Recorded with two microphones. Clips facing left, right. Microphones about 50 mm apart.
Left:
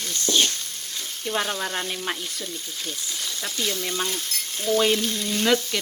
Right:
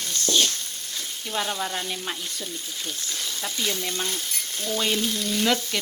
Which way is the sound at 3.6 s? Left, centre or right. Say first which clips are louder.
Left 1 dB; centre.